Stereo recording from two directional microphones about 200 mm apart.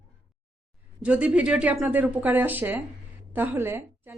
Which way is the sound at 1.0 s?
5° right (ahead or behind).